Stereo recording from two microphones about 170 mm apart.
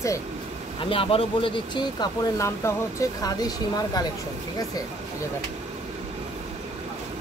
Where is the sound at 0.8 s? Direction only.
35° left (ahead or behind).